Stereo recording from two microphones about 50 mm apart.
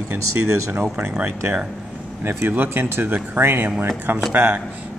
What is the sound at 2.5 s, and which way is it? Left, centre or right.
Speech, right.